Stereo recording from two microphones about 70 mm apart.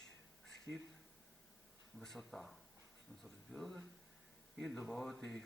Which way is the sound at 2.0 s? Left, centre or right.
Centre.